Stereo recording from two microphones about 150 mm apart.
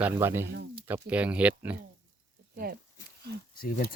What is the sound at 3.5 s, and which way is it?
Speech, 75° left (ahead or behind).